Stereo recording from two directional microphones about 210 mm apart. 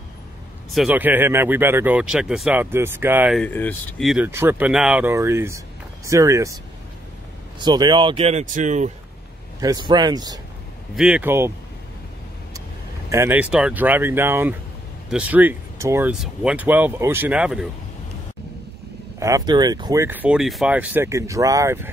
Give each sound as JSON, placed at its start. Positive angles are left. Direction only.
{"t": 0.7, "sound": "speech", "side_deg": 0}
{"t": 3.3, "sound": "speech", "side_deg": 10}
{"t": 7.6, "sound": "speech", "side_deg": -20}
{"t": 9.6, "sound": "speech", "side_deg": -20}
{"t": 11.0, "sound": "speech", "side_deg": -5}
{"t": 13.1, "sound": "speech", "side_deg": -10}
{"t": 19.1, "sound": "speech", "side_deg": -15}